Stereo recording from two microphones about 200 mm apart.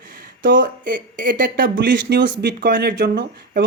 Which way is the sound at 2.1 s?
60° right (ahead or behind).